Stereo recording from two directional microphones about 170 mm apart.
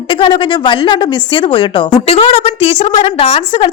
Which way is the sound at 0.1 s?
30° left (ahead or behind).